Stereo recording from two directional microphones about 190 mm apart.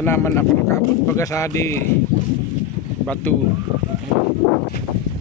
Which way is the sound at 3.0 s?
10° left (ahead or behind).